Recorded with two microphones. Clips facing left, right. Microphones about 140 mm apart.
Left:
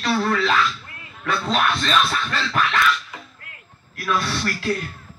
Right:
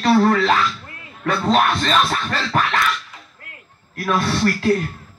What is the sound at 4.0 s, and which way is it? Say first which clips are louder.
Speech: right 5 dB; 45° right (ahead or behind).